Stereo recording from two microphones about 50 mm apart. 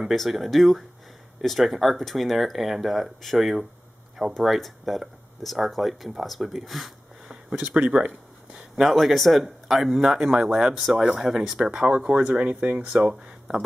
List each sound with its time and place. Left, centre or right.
0.1 s speech: centre
7.5 s speech: right
8.8 s speech: centre
12.2 s speech: right
13.0 s speech: centre